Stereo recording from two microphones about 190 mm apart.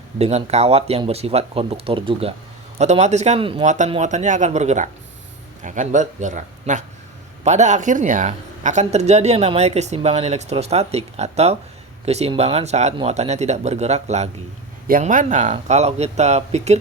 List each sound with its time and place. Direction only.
0.2 s speech: 35° right (ahead or behind)
14.8 s speech: 45° right (ahead or behind)